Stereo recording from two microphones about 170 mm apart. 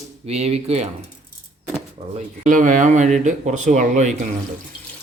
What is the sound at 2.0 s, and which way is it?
Pigeon, 40° right (ahead or behind).